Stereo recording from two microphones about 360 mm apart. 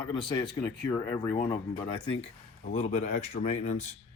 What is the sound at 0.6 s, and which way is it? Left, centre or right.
Speech, centre.